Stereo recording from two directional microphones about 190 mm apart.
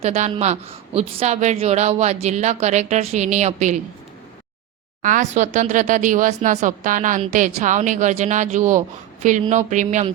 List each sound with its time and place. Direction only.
0.0 s speech: 35° right (ahead or behind)
5.0 s speech: 40° right (ahead or behind)